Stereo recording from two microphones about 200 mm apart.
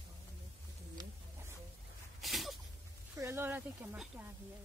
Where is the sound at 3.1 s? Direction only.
10° right (ahead or behind).